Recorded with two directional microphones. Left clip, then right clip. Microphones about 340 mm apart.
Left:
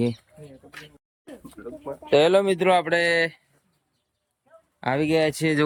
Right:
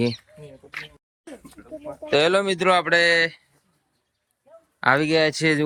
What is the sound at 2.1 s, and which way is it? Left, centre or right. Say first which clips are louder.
Rub: left 1 dB; centre.